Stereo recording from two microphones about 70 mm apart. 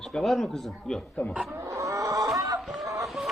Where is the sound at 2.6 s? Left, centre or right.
Centre.